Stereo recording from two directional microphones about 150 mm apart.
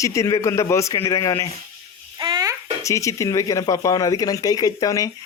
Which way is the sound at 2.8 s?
20° left (ahead or behind).